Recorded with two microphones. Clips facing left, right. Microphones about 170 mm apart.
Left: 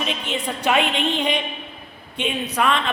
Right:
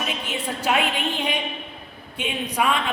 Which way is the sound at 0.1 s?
10° right (ahead or behind).